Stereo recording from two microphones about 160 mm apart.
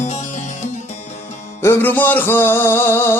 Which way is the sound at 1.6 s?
15° left (ahead or behind).